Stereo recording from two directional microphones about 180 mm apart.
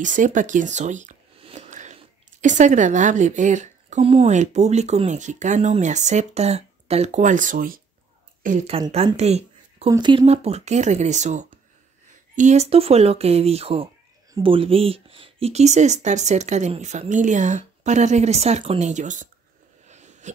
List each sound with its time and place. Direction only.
0.0 s speech: 45° right (ahead or behind)
1.4 s a sound: 40° right (ahead or behind)
2.4 s a woman's voice: 45° right (ahead or behind)
8.6 s speech: 35° right (ahead or behind)
9.8 s a woman's voice: 25° right (ahead or behind); by 19.2 s 40° right (ahead or behind)
19.9 s a sound: 40° right (ahead or behind)